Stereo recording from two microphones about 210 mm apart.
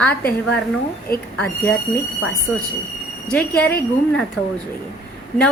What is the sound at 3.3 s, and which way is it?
Speech, 5° left (ahead or behind).